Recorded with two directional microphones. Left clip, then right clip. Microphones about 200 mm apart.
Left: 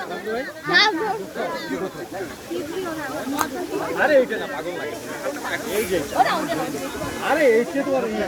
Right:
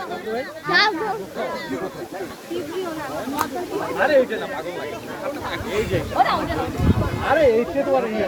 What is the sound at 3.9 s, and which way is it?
Speech, 50° left (ahead or behind).